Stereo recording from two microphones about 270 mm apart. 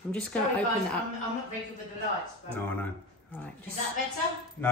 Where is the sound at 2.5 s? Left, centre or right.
Centre.